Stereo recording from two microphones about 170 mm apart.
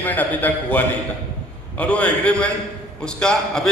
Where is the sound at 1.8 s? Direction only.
10° left (ahead or behind).